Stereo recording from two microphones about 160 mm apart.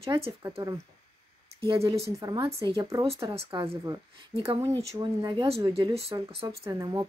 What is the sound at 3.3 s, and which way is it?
Speech, 35° right (ahead or behind).